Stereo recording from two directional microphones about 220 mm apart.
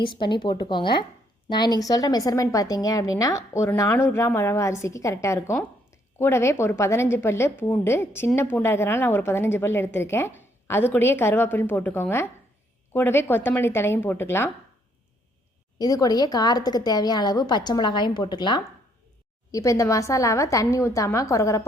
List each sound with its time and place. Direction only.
0.0 s a woman's voice: 20° left (ahead or behind)
15.8 s a woman's voice: 15° left (ahead or behind)